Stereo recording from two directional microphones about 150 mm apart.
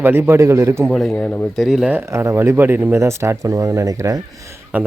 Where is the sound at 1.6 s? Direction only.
5° right (ahead or behind); by 4.2 s 20° right (ahead or behind).